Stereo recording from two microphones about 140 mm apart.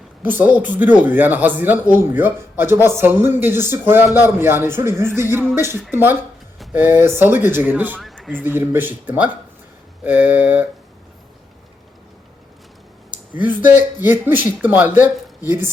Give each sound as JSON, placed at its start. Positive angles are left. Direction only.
{"t": 0.2, "sound": "a man's voice", "side_deg": -15}
{"t": 7.9, "sound": "a sound", "side_deg": 5}
{"t": 8.4, "sound": "a man's voice", "side_deg": -15}
{"t": 13.3, "sound": "a man's voice", "side_deg": -10}